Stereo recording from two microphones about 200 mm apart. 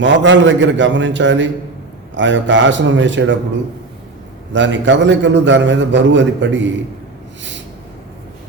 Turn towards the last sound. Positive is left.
turn(degrees=-65)  # may be behind; listen again after turning